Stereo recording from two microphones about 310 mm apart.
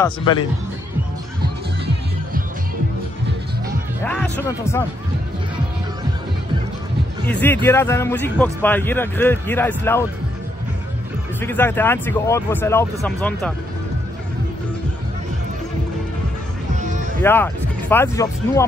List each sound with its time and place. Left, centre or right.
0.0 s a man's voice: centre
4.0 s a man's voice: centre
7.2 s a man's voice: centre
11.4 s a man's voice: centre
17.2 s a man's voice: centre